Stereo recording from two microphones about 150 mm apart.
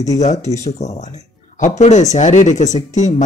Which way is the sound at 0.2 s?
50° left (ahead or behind).